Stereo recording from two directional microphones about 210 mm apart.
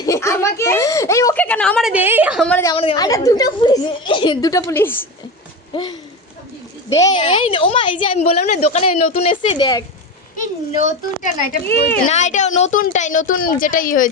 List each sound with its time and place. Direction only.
0.0 s a sound: 15° left (ahead or behind)
1.9 s a woman's voice: 10° right (ahead or behind)
2.5 s speech: 10° left (ahead or behind)
2.7 s a woman's voice: 25° left (ahead or behind)
10.8 s a woman's voice: 35° left (ahead or behind)